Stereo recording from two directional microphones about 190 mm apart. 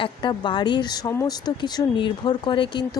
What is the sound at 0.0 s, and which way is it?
Speech, 25° left (ahead or behind).